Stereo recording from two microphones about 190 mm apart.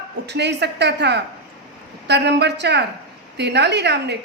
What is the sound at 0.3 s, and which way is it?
A woman's voice, 65° right (ahead or behind).